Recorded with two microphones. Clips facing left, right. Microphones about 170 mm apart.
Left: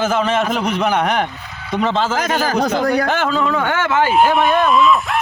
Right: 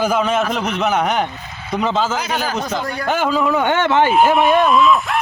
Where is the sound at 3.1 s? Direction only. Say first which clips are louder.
Right 1 dB; 5° right (ahead or behind).